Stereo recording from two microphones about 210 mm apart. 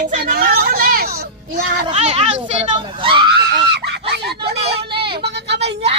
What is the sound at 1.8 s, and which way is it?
Speech, 30° right (ahead or behind).